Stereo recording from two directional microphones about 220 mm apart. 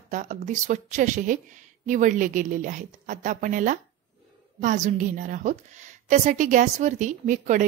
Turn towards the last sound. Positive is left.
turn(degrees=-35)  # may be behind; listen again after turning